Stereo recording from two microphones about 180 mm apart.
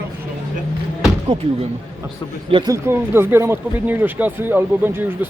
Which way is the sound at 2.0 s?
15° right (ahead or behind).